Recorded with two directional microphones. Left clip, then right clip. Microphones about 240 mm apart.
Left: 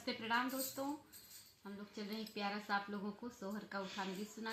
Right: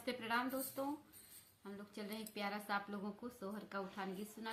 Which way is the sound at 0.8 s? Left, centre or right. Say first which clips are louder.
Even; centre.